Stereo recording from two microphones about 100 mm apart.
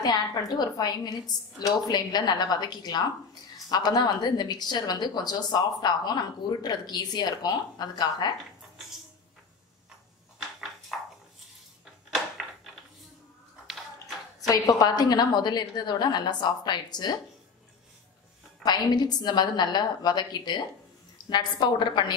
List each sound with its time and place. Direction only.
0.0 s a woman's voice: 45° left (ahead or behind)
10.9 s a sound: centre (ahead or behind)
14.5 s a woman's voice: 40° left (ahead or behind)
18.6 s a woman's voice: 45° left (ahead or behind)